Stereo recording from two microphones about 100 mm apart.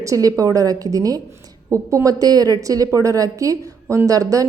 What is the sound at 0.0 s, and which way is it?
A woman's voice, 35° right (ahead or behind).